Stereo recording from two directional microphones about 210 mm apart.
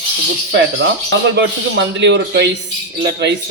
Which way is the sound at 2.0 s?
55° right (ahead or behind).